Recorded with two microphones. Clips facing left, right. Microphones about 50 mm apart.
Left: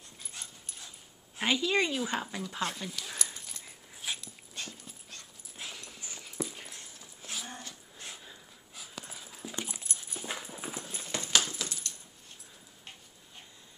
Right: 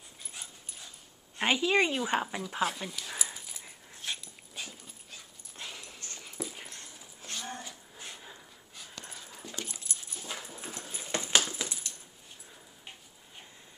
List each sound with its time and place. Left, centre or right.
0.2 s dog: centre
1.4 s a woman's voice: centre
2.6 s dog: centre
5.9 s dog: centre
6.2 s dog: centre
7.2 s cattle: centre
8.7 s dog: centre
9.6 s dog: left
10.3 s clip-clop: centre
10.8 s clip-clop: centre
11.1 s a sound: right